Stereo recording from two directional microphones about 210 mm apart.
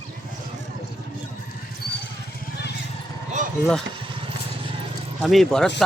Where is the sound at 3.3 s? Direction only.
35° right (ahead or behind).